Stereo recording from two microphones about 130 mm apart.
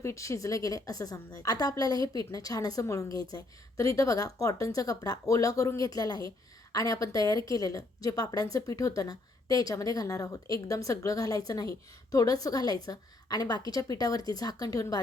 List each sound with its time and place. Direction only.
0.0 s a woman's voice: 20° left (ahead or behind)